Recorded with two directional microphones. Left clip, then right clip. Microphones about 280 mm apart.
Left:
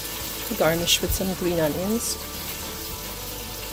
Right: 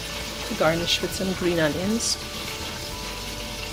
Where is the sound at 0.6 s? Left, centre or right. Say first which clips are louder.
Left 1 dB; left.